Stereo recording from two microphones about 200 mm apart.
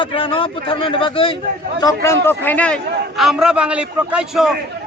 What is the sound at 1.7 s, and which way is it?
A man's voice, 15° left (ahead or behind).